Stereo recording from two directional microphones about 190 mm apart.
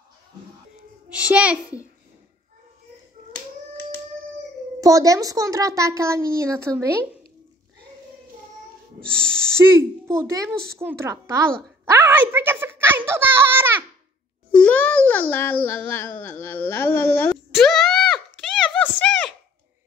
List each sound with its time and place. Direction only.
1.0 s a child's voice: 5° right (ahead or behind)
4.7 s a child's voice: 20° right (ahead or behind)
9.1 s speech: 5° left (ahead or behind)
9.6 s a child's voice: 15° right (ahead or behind)
11.8 s a sound: 15° right (ahead or behind)
14.5 s a sound: 5° left (ahead or behind)